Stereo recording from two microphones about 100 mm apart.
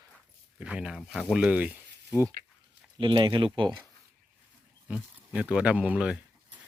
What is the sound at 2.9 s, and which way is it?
Speech, 55° right (ahead or behind).